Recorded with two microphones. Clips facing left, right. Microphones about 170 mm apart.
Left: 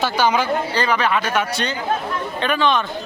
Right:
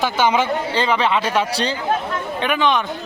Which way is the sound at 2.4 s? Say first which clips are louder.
Even; 15° right (ahead or behind).